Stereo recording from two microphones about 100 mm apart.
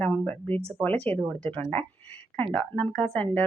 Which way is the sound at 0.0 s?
15° left (ahead or behind).